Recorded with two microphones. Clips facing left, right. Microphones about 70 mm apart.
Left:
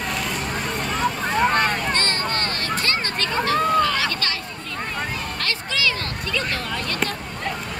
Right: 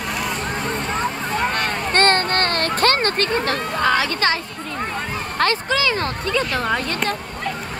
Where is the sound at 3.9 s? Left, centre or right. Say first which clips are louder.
Right 6 dB; right.